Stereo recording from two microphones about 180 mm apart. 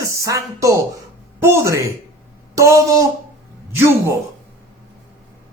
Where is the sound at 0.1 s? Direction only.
15° right (ahead or behind).